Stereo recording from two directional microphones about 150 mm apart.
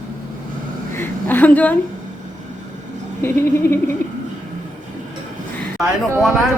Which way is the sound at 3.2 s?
15° left (ahead or behind).